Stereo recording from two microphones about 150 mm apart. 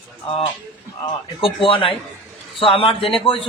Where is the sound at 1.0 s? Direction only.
35° left (ahead or behind).